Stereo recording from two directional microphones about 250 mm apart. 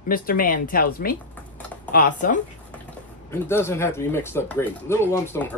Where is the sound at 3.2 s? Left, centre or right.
Centre.